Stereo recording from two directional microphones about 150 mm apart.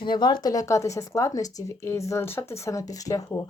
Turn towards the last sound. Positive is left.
turn(degrees=25)  # may be behind; listen again after turning